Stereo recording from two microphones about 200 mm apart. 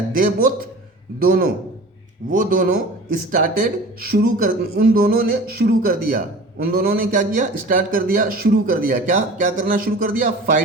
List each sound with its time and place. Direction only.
0.1 s speech: 45° right (ahead or behind)